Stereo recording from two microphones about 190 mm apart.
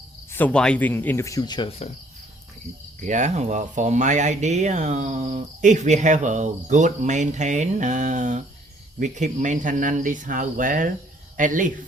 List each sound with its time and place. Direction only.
0.3 s speech: 10° left (ahead or behind)
3.1 s speech: 40° right (ahead or behind)